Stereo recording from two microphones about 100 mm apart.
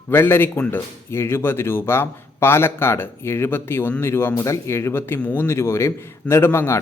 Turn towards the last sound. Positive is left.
turn(degrees=25)  # may be behind; listen again after turning